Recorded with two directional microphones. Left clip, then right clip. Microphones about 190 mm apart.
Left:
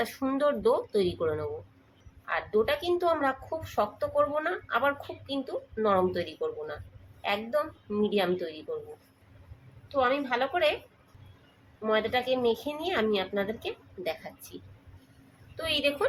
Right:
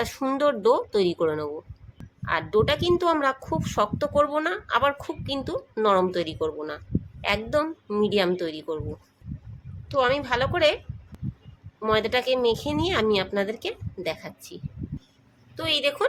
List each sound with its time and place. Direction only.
0.0 s a woman's voice: 40° right (ahead or behind)
9.9 s a woman's voice: 55° right (ahead or behind)
11.8 s a woman's voice: 55° right (ahead or behind)
15.5 s speech: 40° right (ahead or behind)